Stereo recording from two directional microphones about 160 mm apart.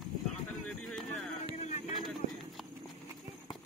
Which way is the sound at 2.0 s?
Centre (ahead or behind).